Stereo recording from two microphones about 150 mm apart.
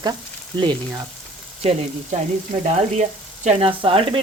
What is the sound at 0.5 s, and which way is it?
Speech, 30° right (ahead or behind).